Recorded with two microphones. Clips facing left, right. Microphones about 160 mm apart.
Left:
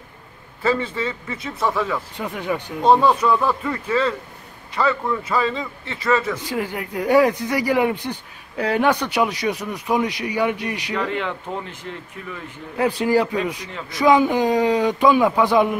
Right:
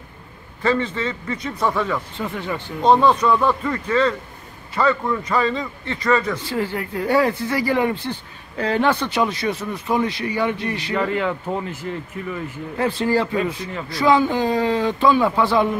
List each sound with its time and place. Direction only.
0.6 s a man's voice: 10° left (ahead or behind)
11.0 s a man's voice: 5° right (ahead or behind)
12.7 s speech: 10° left (ahead or behind)